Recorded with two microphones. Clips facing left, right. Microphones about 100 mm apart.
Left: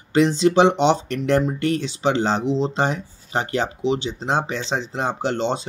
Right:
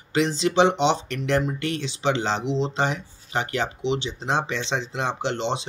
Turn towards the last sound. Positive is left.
turn(degrees=45)  # may be behind; listen again after turning